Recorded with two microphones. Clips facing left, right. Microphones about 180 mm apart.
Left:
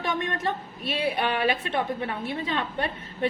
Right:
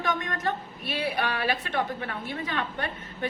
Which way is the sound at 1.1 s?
25° left (ahead or behind).